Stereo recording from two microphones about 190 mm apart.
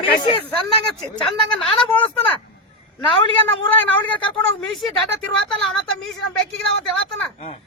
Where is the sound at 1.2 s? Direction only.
5° left (ahead or behind).